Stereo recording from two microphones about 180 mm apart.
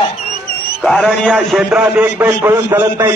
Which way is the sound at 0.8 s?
Centre (ahead or behind).